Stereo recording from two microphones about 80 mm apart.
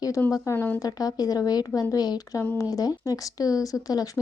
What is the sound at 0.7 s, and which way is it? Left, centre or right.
A woman's voice, left.